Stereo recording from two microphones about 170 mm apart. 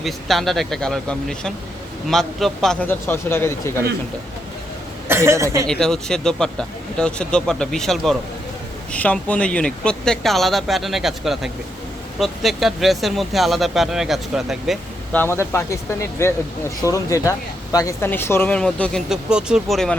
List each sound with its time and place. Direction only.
0.0 s speech: centre (ahead or behind)
5.0 s speech: 15° right (ahead or behind)
5.6 s speech: 5° left (ahead or behind)
15.1 s speech: 10° left (ahead or behind)